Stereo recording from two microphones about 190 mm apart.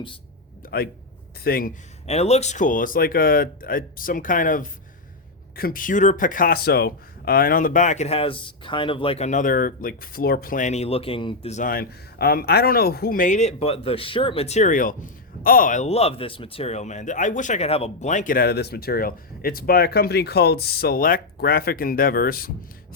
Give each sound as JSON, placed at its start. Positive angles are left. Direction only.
{"t": 0.6, "sound": "a sound", "side_deg": 45}
{"t": 1.5, "sound": "speech", "side_deg": 50}
{"t": 2.0, "sound": "speech", "side_deg": 35}